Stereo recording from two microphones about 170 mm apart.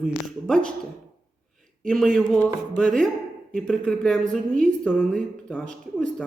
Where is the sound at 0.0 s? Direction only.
Centre (ahead or behind).